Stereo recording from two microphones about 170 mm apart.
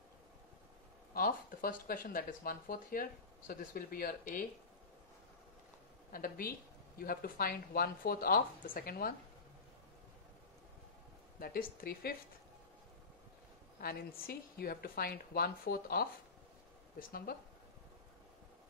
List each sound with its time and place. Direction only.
1.1 s speech: 60° left (ahead or behind)
6.1 s speech: 60° left (ahead or behind)
11.3 s speech: 60° left (ahead or behind)
13.7 s speech: 60° left (ahead or behind)